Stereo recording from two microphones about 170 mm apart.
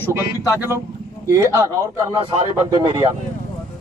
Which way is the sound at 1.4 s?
15° right (ahead or behind).